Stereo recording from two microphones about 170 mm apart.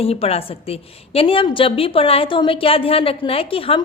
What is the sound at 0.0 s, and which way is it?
A woman's voice, 35° left (ahead or behind).